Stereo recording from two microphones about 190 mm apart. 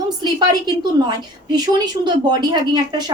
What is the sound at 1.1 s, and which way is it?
Speech, 20° right (ahead or behind).